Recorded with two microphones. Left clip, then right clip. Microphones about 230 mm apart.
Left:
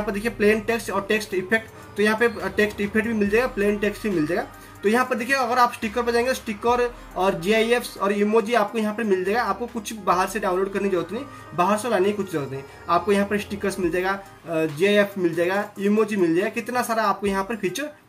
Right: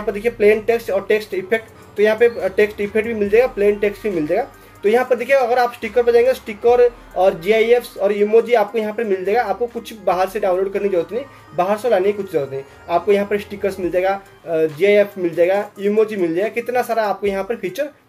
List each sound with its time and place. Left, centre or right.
0.1 s speech: right